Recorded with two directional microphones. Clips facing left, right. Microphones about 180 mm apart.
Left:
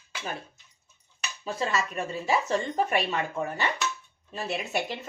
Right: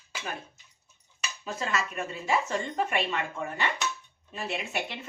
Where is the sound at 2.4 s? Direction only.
40° left (ahead or behind).